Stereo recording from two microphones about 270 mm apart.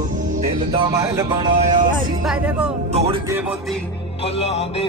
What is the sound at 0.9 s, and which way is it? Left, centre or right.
Music, centre.